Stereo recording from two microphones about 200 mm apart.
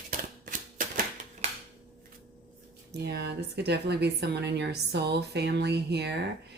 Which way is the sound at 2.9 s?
55° right (ahead or behind).